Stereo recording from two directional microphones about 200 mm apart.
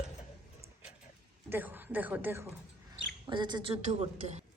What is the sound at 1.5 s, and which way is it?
Speech, 10° right (ahead or behind).